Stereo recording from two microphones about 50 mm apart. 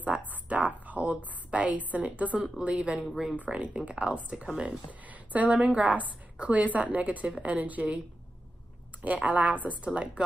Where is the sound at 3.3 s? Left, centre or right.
Right.